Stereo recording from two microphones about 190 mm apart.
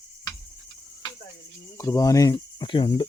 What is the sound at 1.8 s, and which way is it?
Speech, 15° left (ahead or behind).